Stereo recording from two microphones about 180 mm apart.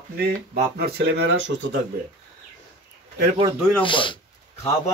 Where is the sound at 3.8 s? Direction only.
25° left (ahead or behind).